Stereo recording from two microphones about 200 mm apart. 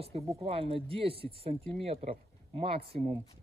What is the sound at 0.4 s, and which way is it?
A man's voice, 30° right (ahead or behind).